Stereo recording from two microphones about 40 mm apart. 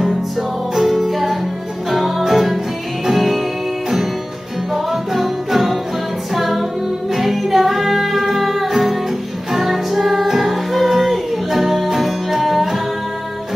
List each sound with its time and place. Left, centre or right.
0.7 s music: centre
5.1 s music: centre